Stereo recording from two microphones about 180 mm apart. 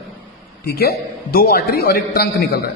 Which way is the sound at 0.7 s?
60° left (ahead or behind).